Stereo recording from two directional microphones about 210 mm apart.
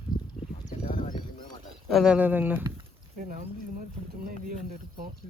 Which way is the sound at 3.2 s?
40° right (ahead or behind).